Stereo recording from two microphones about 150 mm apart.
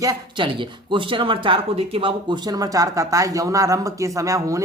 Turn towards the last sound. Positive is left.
turn(degrees=-20)  # may be behind; listen again after turning